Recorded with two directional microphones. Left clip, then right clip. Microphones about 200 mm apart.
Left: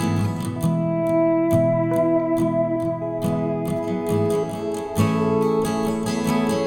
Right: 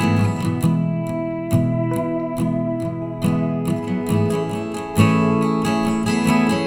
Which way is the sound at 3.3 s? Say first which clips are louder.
Even; 10° right (ahead or behind).